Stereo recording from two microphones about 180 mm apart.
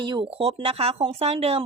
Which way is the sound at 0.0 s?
25° right (ahead or behind).